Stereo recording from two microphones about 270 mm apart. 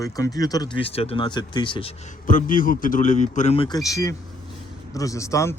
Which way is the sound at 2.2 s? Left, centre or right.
Left.